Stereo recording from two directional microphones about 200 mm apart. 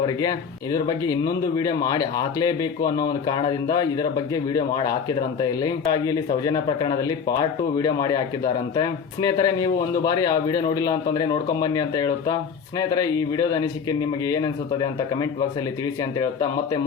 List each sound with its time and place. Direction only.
0.0 s speech: 20° left (ahead or behind)